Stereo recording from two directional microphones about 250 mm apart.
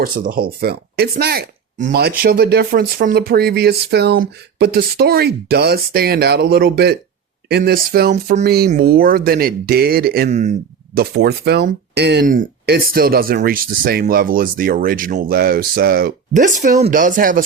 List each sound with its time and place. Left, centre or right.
0.0 s speech: right
10.9 s speech: right